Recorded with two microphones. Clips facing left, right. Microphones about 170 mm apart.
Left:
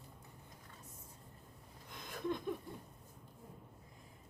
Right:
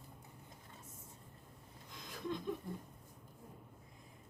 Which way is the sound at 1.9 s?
55° left (ahead or behind).